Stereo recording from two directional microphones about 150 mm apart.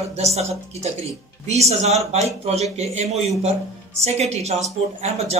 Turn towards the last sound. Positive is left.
turn(degrees=-45)  # may be behind; listen again after turning